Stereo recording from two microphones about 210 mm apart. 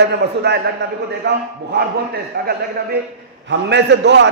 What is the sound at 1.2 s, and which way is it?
Speech, 55° right (ahead or behind).